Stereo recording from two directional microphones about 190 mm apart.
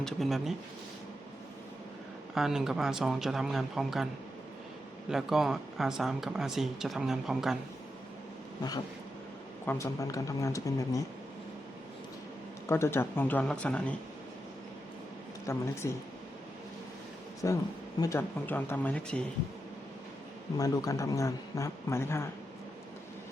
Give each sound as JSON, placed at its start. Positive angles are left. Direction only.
{"t": 0.0, "sound": "speech", "side_deg": 0}
{"t": 2.3, "sound": "speech", "side_deg": 0}
{"t": 9.6, "sound": "a man's voice", "side_deg": 15}
{"t": 12.6, "sound": "a man's voice", "side_deg": 15}
{"t": 15.4, "sound": "a man's voice", "side_deg": 15}
{"t": 17.4, "sound": "a man's voice", "side_deg": 15}
{"t": 20.6, "sound": "a man's voice", "side_deg": 20}